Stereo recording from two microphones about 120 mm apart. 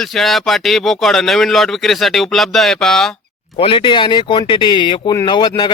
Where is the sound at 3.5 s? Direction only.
45° left (ahead or behind).